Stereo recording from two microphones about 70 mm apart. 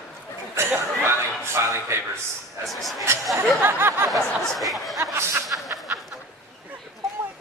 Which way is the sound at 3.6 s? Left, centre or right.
Right.